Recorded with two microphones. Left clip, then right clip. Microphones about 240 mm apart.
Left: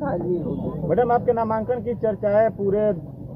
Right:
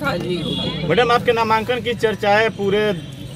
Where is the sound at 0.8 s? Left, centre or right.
Right.